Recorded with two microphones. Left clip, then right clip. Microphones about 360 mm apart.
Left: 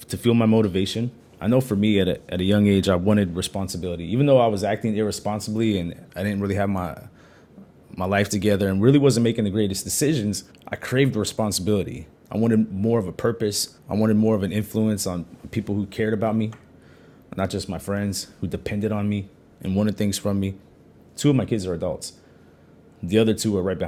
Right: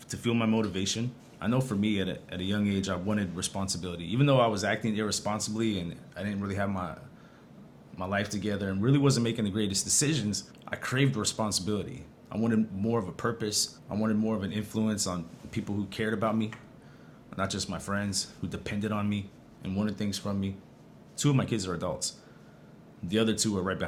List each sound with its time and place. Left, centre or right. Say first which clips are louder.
0.1 s speech: left 9 dB; left
21.2 s speech: left 8 dB; left
23.0 s speech: left 8 dB; left